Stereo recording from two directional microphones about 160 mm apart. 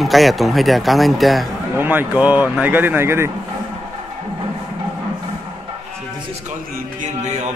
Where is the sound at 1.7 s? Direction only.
10° right (ahead or behind).